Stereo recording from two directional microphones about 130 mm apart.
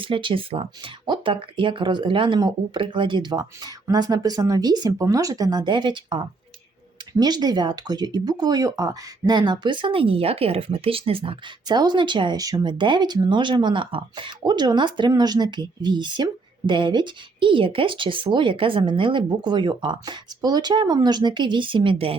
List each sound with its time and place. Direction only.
0.0 s speech: 40° right (ahead or behind)
11.8 s speech: 35° right (ahead or behind)